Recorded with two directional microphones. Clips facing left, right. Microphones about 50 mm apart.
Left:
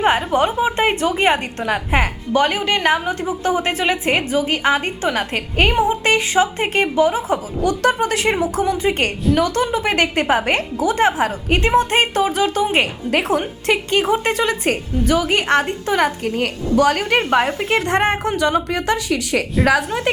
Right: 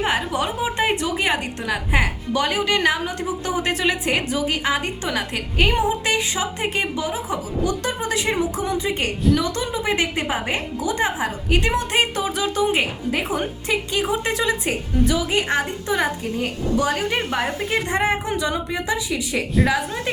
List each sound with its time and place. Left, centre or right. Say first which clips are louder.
0.0 s a woman's voice: left 6 dB; left
12.8 s a woman's voice: left 4 dB; left
17.7 s a woman's voice: left 3 dB; left